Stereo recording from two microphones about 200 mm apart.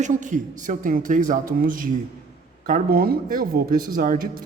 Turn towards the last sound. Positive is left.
turn(degrees=-45)  # may be behind; listen again after turning